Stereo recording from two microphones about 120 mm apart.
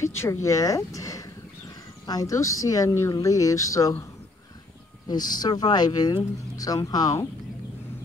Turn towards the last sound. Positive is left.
turn(degrees=30)  # may be behind; listen again after turning